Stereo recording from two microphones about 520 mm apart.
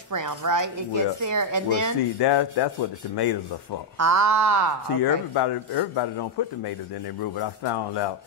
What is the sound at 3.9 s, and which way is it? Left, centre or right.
Speech, right.